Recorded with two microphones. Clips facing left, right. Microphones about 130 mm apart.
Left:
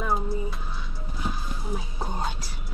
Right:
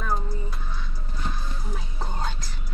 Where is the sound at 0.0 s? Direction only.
5° left (ahead or behind).